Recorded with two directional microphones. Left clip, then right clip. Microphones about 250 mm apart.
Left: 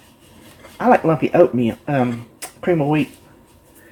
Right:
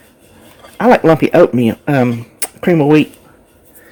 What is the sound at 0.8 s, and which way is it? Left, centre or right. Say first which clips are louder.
Speech: right 6 dB; right.